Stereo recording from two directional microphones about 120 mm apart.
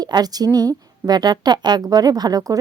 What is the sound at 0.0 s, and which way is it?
Speech, 35° right (ahead or behind).